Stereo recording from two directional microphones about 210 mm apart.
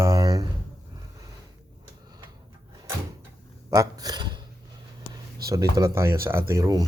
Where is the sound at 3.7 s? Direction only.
15° right (ahead or behind).